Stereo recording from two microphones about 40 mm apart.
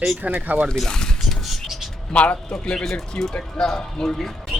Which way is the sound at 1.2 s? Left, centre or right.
Centre.